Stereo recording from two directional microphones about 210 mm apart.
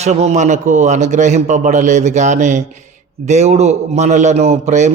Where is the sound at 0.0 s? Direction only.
30° right (ahead or behind).